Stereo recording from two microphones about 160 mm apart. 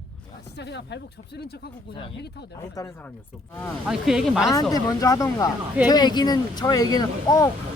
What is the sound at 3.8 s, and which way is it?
Speech, centre (ahead or behind).